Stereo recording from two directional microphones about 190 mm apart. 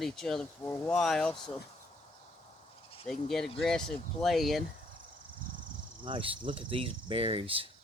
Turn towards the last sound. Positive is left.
turn(degrees=-30)  # may be behind; listen again after turning